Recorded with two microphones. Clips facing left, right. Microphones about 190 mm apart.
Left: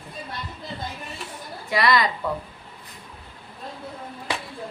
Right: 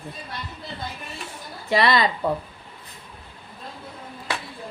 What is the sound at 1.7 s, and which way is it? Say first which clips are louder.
Speech: right 1 dB; 25° right (ahead or behind).